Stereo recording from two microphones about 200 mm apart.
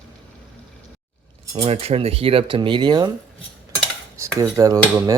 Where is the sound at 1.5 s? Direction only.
30° right (ahead or behind).